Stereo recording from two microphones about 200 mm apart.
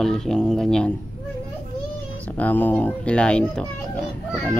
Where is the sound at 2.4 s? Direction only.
10° left (ahead or behind).